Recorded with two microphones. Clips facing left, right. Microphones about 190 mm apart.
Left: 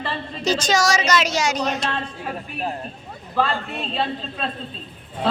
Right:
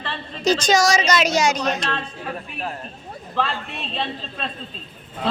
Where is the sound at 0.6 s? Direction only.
15° right (ahead or behind).